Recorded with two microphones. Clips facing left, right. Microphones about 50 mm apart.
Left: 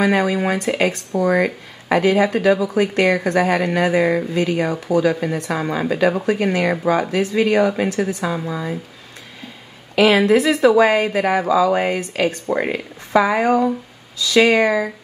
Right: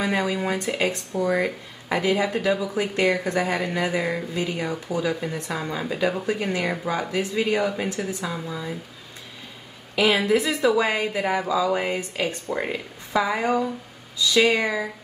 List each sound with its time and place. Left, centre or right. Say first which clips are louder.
0.0 s speech: left 7 dB; left
9.9 s speech: left 6 dB; left
14.1 s speech: left 5 dB; left